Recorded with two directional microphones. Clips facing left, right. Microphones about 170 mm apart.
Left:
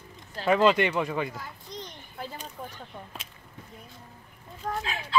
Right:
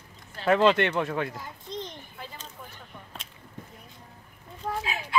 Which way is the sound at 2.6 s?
40° left (ahead or behind).